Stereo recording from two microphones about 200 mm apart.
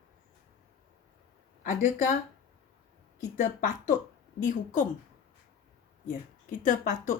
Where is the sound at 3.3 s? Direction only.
40° left (ahead or behind).